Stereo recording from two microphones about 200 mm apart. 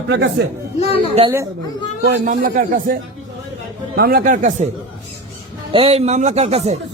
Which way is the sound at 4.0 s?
50° right (ahead or behind).